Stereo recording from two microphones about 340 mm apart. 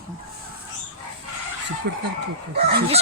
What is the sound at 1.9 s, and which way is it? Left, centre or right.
Speech, right.